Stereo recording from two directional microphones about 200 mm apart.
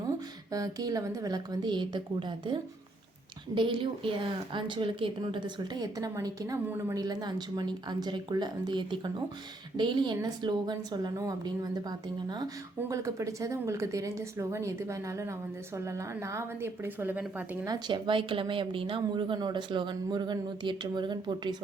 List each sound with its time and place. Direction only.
0.5 s a woman's voice: 20° right (ahead or behind)
17.7 s a woman's voice: 20° right (ahead or behind)